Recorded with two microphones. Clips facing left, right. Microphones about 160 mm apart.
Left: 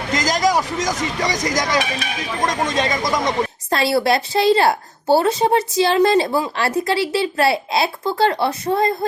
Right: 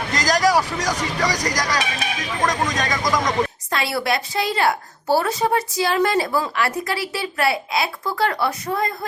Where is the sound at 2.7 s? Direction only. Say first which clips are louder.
Left 2 dB; 25° left (ahead or behind).